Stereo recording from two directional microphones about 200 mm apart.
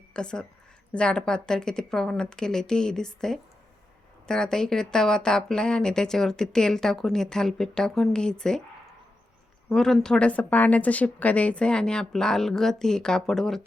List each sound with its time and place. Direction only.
0.1 s a woman's voice: 5° left (ahead or behind)
9.6 s a woman's voice: 5° left (ahead or behind)